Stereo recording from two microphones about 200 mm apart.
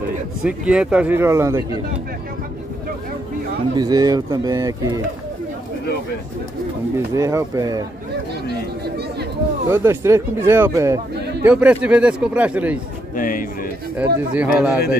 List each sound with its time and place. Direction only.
0.4 s speech: 5° right (ahead or behind)
3.7 s speech: 20° right (ahead or behind)
7.2 s speech: 15° right (ahead or behind)
9.7 s speech: 15° right (ahead or behind)
13.1 s a man's voice: 45° left (ahead or behind)
14.3 s speech: 5° right (ahead or behind)